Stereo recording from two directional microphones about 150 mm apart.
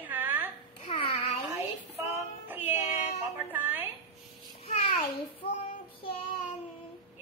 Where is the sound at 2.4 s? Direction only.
10° right (ahead or behind).